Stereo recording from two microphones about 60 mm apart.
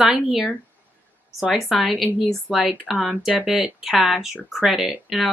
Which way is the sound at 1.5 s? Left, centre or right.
Centre.